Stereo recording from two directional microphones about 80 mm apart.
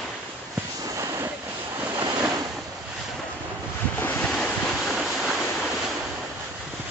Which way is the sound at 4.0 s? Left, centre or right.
Left.